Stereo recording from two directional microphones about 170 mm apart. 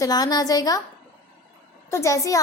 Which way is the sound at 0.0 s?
25° left (ahead or behind).